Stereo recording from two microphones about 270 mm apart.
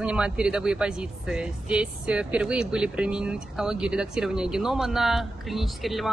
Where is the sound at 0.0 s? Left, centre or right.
Centre.